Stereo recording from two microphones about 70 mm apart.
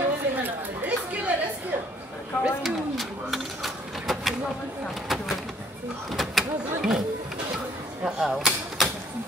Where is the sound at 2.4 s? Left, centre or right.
Centre.